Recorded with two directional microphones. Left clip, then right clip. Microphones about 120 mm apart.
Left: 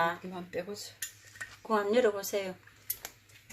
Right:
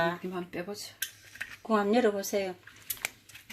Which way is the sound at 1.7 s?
30° right (ahead or behind).